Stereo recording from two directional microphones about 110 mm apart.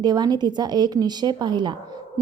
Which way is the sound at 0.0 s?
40° right (ahead or behind).